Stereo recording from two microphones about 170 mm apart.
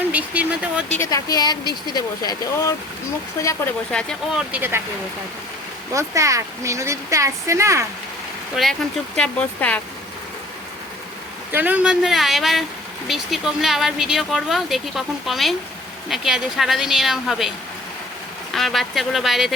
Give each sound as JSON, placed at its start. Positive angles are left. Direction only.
{"t": 0.1, "sound": "speech", "side_deg": -10}
{"t": 0.9, "sound": "speech", "side_deg": 20}
{"t": 3.9, "sound": "speech", "side_deg": 5}
{"t": 4.5, "sound": "speech", "side_deg": -15}
{"t": 5.9, "sound": "speech", "side_deg": -20}
{"t": 8.5, "sound": "speech", "side_deg": 0}
{"t": 11.5, "sound": "speech", "side_deg": -10}
{"t": 18.5, "sound": "speech", "side_deg": 0}